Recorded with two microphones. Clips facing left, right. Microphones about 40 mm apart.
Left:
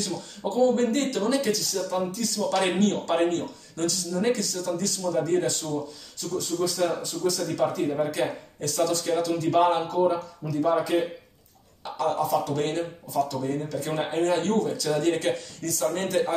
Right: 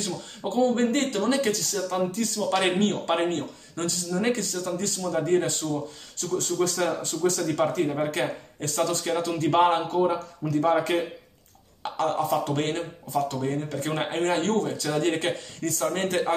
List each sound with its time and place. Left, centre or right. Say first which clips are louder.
0.0 s speech: left 1 dB; right
6.1 s speech: right 2 dB; right